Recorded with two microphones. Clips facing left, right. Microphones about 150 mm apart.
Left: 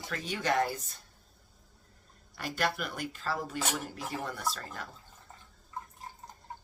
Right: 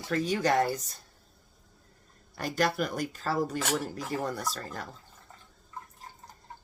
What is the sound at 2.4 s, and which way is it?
Speech, 45° right (ahead or behind).